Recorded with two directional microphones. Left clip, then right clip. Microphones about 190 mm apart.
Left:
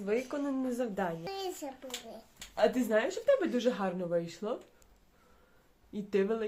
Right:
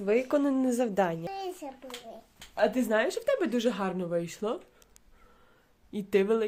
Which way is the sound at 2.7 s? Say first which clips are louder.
Right 3 dB; 65° right (ahead or behind).